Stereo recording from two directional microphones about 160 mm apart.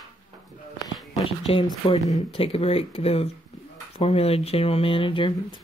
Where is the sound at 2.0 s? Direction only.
35° left (ahead or behind).